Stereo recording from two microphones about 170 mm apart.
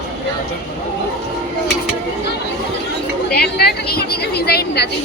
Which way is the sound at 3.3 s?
70° left (ahead or behind).